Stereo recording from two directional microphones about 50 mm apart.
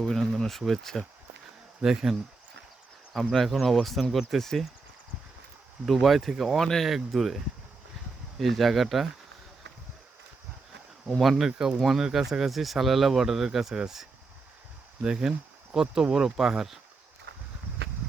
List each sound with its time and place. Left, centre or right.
0.0 s speech: centre
1.8 s speech: centre
3.1 s speech: centre
5.8 s speech: centre
8.4 s speech: centre
11.2 s speech: centre
11.5 s speech: centre
11.8 s speech: centre